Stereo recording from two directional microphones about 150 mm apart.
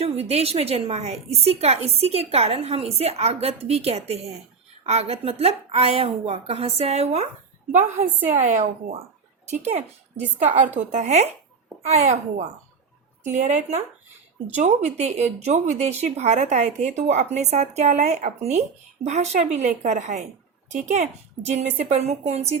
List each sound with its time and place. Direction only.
0.0 s a woman's voice: 45° right (ahead or behind)
8.4 s a woman's voice: 55° right (ahead or behind)
13.3 s a woman's voice: 55° right (ahead or behind)